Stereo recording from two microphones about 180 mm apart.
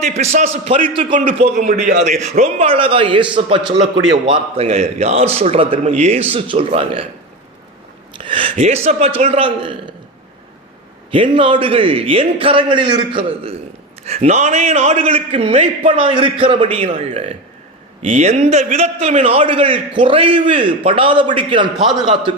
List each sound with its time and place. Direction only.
0.0 s a man's voice: 35° right (ahead or behind)
1.5 s a man's voice: 50° right (ahead or behind)
2.3 s a man's voice: 40° right (ahead or behind)
8.1 s a man's voice: 30° right (ahead or behind)
11.1 s a man's voice: 30° right (ahead or behind)